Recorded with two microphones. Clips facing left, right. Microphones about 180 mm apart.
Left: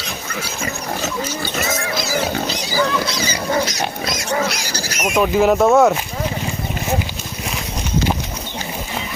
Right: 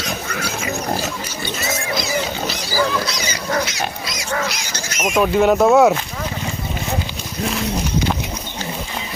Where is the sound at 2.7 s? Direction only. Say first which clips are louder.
Even; centre (ahead or behind).